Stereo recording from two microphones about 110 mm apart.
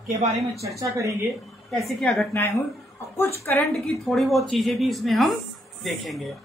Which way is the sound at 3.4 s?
25° left (ahead or behind).